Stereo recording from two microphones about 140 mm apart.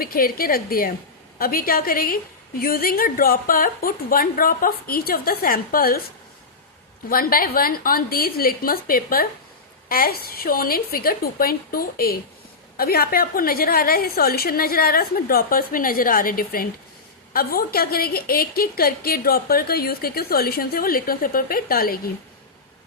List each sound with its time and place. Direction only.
0.0 s a woman's voice: 90° left
7.1 s a woman's voice: 90° left